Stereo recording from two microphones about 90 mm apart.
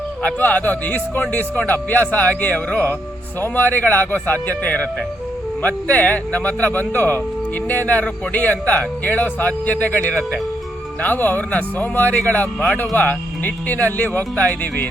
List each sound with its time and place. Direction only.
0.2 s a man's voice: 15° left (ahead or behind)